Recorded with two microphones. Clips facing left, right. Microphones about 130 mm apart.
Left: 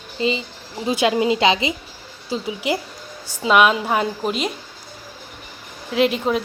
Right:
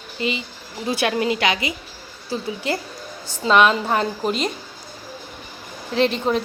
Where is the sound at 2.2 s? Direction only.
15° left (ahead or behind).